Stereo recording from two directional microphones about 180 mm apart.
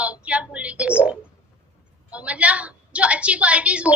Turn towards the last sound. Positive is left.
turn(degrees=-5)  # may be behind; listen again after turning